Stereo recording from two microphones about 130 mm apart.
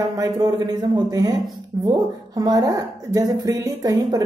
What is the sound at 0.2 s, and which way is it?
Speech, 30° right (ahead or behind).